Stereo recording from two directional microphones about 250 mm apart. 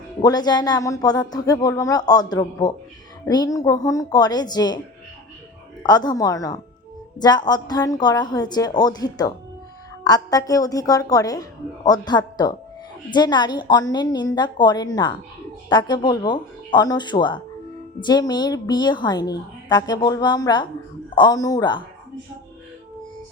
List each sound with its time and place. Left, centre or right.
0.2 s a woman's voice: centre
5.8 s a woman's voice: centre